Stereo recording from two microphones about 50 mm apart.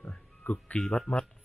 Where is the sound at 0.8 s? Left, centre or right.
Centre.